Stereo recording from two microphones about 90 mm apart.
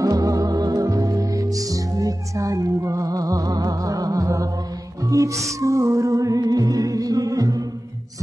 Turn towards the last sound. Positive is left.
turn(degrees=-45)  # may be behind; listen again after turning